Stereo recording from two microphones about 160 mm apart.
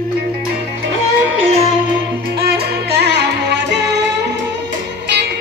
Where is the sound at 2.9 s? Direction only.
90° right.